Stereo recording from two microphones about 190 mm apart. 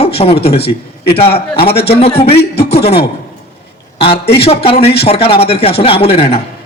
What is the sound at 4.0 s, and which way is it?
A man's voice, 30° left (ahead or behind).